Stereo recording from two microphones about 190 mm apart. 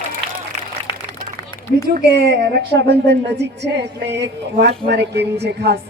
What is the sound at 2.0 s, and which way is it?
A woman's voice, 60° right (ahead or behind).